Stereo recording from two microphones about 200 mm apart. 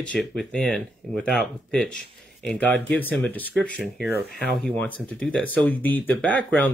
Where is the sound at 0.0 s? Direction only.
5° left (ahead or behind).